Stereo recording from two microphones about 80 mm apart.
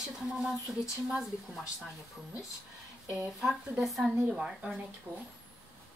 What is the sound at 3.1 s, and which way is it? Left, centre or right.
Speech, centre.